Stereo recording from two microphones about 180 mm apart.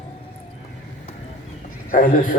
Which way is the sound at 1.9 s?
50° left (ahead or behind).